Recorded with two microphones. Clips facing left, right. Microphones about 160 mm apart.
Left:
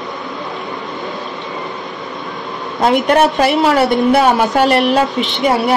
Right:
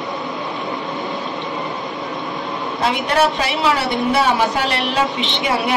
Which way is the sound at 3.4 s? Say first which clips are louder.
Left 7 dB; 50° left (ahead or behind).